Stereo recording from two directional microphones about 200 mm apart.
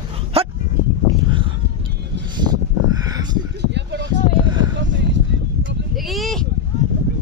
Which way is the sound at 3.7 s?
60° right (ahead or behind).